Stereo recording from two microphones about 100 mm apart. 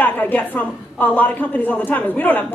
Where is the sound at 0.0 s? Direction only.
15° left (ahead or behind).